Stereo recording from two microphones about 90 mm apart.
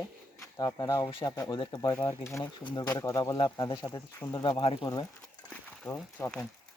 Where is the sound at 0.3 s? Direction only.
40° left (ahead or behind).